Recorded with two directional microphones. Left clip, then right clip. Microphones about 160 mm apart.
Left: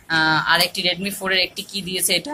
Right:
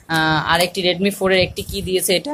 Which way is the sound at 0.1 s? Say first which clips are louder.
Even; 40° right (ahead or behind).